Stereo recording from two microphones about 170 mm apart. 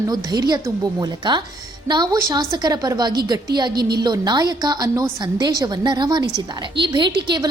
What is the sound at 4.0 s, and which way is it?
A woman's voice, 25° right (ahead or behind).